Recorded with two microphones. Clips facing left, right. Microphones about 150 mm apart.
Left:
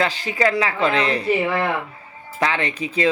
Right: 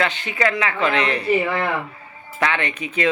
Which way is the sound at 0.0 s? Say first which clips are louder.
Left 1 dB; 35° left (ahead or behind).